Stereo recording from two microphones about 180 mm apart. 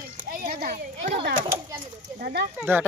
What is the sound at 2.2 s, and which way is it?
Speech, 60° right (ahead or behind).